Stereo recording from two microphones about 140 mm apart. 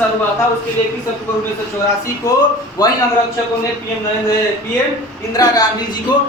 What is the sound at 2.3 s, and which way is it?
Speech, 25° left (ahead or behind).